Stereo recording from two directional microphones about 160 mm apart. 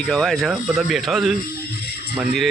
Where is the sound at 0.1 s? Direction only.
Centre (ahead or behind).